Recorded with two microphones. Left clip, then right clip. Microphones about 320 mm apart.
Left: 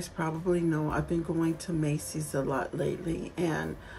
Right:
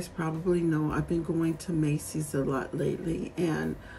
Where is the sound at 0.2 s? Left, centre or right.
Centre.